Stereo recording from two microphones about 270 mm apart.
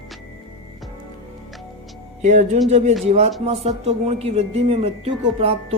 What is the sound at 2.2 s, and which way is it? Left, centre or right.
Speech, right.